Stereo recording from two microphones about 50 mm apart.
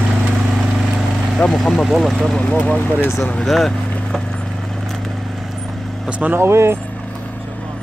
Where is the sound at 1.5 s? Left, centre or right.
Centre.